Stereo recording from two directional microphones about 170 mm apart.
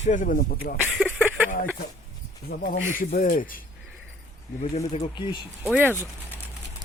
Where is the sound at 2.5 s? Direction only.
50° left (ahead or behind).